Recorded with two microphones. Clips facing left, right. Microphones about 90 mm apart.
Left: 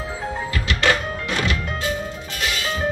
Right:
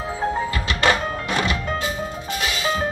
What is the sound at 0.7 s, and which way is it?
Music, 25° right (ahead or behind).